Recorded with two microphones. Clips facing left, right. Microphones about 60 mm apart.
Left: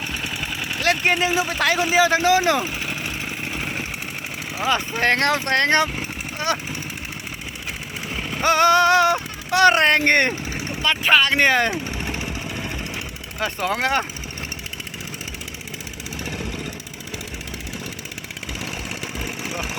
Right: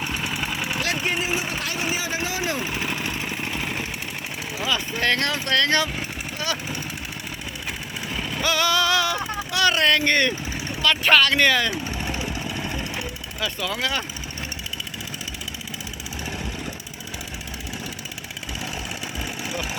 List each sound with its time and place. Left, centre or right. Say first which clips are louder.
0.1 s vehicle: right 1 dB; centre
0.8 s speech: left 8 dB; left
3.0 s vehicle: right 1 dB; centre
4.5 s speech: left 4 dB; left
8.1 s speech: left 5 dB; left
10.8 s speech: even; left
13.4 s speech: left 4 dB; left
19.2 s vehicle: even; left